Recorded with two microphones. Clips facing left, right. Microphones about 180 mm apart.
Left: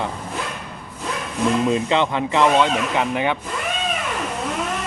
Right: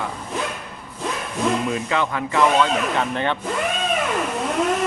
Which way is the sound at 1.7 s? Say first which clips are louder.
Left 4 dB; 25° left (ahead or behind).